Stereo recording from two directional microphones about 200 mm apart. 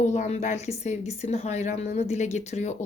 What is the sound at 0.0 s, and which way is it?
A woman's voice, 35° left (ahead or behind).